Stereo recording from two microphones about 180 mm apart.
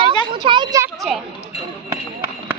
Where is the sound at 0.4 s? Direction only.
25° right (ahead or behind).